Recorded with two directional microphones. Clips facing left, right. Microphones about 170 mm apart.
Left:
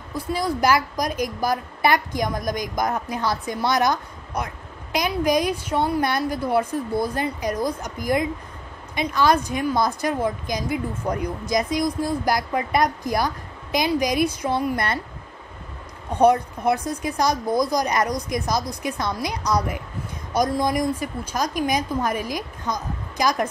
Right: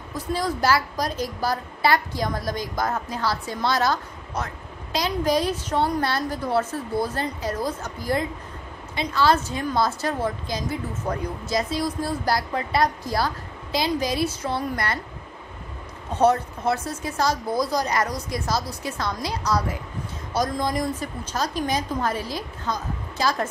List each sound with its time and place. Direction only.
0.1 s a woman's voice: 10° left (ahead or behind)
16.1 s a woman's voice: 15° left (ahead or behind)